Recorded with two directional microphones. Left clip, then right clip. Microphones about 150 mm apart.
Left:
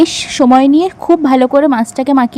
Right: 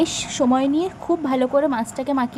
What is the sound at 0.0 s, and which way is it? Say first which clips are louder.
Speech: left 10 dB; 45° left (ahead or behind).